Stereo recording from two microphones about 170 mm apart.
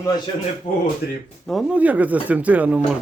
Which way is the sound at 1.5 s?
Centre (ahead or behind).